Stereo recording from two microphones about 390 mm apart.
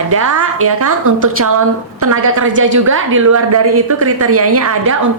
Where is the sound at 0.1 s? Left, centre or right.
Right.